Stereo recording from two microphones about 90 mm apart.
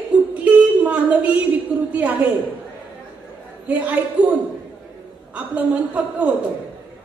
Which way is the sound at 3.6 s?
15° right (ahead or behind).